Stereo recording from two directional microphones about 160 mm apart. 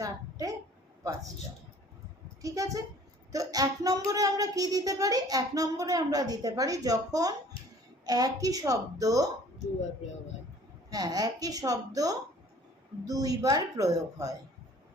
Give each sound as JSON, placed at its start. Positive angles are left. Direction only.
{"t": 0.0, "sound": "a sound", "side_deg": -20}
{"t": 2.4, "sound": "child singing", "side_deg": -20}
{"t": 10.8, "sound": "child singing", "side_deg": -25}